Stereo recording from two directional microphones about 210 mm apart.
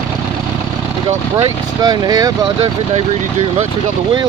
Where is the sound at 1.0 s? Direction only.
20° right (ahead or behind).